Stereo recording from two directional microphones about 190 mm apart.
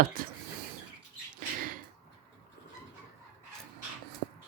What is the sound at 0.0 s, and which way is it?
Speech, 50° right (ahead or behind).